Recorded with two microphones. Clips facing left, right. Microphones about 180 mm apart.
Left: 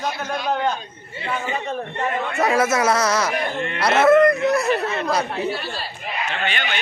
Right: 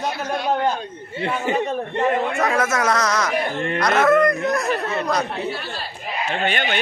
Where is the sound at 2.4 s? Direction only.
10° left (ahead or behind).